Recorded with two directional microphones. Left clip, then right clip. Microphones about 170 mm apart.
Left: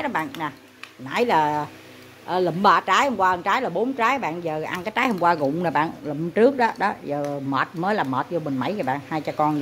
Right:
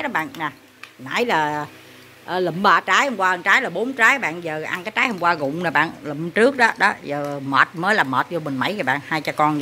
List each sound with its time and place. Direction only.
0.0 s a woman's voice: centre (ahead or behind)
7.2 s speech: 5° right (ahead or behind)
7.5 s speech: 5° left (ahead or behind)